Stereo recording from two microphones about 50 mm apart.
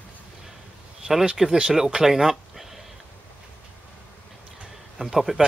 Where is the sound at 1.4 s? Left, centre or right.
Centre.